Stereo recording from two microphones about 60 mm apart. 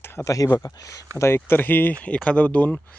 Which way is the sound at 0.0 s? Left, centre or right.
Left.